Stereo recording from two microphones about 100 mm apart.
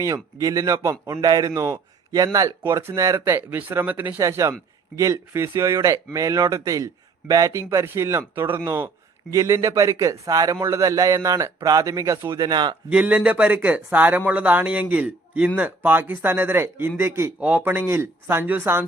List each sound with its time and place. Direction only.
0.0 s a man's voice: 35° right (ahead or behind); by 4.2 s 20° right (ahead or behind)
4.2 s a man's voice: 30° right (ahead or behind)
12.3 s speech: 45° right (ahead or behind)
12.9 s speech: 15° right (ahead or behind)